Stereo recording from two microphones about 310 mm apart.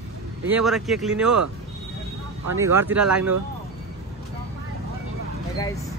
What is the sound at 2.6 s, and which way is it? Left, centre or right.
Speech, centre.